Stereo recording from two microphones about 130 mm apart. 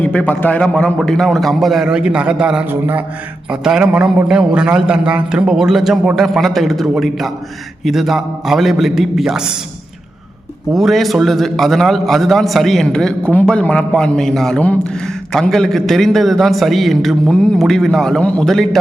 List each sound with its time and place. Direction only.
0.0 s a man's voice: 10° left (ahead or behind); by 3.0 s 15° right (ahead or behind)
3.5 s a man's voice: 5° right (ahead or behind)
10.7 s a man's voice: centre (ahead or behind)